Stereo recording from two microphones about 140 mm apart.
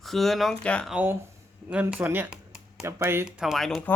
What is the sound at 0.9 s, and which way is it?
Speech, 10° right (ahead or behind).